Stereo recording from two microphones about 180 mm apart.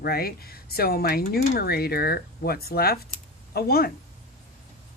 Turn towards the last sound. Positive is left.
turn(degrees=55)  # may be behind; listen again after turning